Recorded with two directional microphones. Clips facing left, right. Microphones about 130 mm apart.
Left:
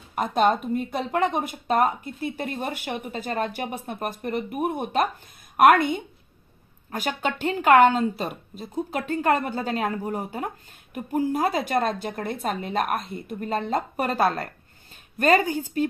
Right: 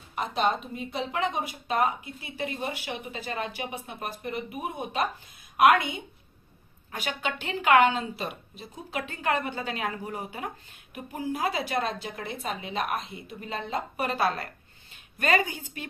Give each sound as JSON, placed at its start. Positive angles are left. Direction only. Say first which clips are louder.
{"t": 0.1, "sound": "a woman's voice", "louder": "left 6 dB", "side_deg": 50}